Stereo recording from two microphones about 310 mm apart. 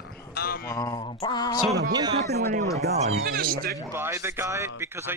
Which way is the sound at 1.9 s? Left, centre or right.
Centre.